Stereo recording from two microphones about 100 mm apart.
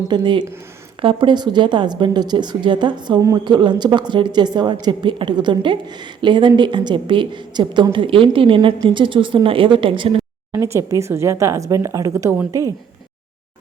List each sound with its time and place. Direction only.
0.1 s a woman's voice: 50° right (ahead or behind)
7.9 s a woman's voice: 60° right (ahead or behind)
10.5 s speech: 25° right (ahead or behind)